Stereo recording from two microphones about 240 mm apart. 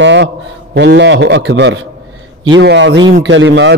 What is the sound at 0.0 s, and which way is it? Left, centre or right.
A man's voice, right.